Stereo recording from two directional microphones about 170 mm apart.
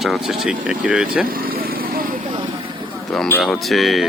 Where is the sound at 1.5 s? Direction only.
60° right (ahead or behind).